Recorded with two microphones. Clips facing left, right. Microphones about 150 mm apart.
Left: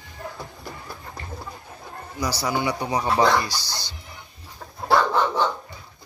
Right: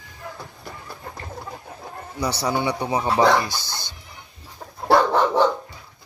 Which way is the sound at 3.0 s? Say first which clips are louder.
Right 2 dB; 10° right (ahead or behind).